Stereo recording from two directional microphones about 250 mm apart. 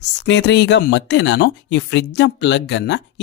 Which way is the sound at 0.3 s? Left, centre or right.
Left.